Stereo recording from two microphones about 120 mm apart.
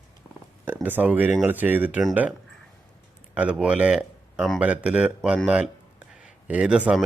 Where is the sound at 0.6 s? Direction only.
15° right (ahead or behind).